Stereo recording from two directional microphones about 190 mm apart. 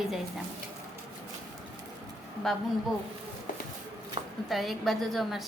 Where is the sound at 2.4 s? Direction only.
Centre (ahead or behind).